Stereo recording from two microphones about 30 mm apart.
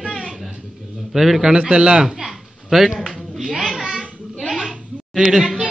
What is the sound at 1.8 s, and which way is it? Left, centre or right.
Speech, right.